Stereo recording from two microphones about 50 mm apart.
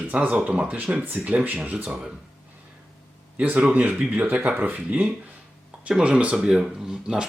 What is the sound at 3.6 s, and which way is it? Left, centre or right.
Speech, right.